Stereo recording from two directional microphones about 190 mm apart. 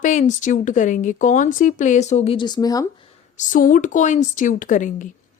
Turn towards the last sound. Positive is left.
turn(degrees=40)  # may be behind; listen again after turning